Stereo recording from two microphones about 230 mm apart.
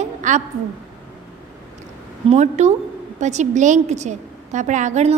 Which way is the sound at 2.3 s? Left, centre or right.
Right.